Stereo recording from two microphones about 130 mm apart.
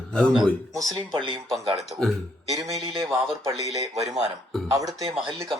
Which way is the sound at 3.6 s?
25° right (ahead or behind).